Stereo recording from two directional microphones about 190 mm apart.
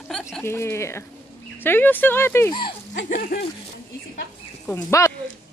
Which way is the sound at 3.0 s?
50° left (ahead or behind).